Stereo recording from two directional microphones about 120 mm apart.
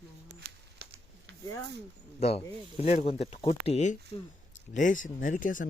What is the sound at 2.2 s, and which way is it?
Speech, 60° left (ahead or behind).